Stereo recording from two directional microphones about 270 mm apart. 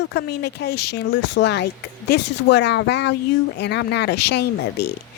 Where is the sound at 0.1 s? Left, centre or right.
Left.